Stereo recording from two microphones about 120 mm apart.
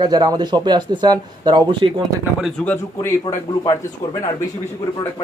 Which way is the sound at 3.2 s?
30° left (ahead or behind).